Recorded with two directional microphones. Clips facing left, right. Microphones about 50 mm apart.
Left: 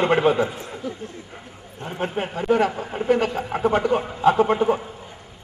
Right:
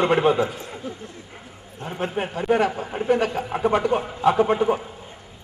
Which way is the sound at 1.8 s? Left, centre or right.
Left.